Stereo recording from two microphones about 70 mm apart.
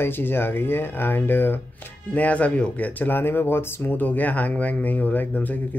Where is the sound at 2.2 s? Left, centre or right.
Left.